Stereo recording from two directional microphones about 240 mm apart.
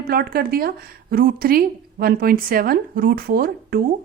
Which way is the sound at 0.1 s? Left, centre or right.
Right.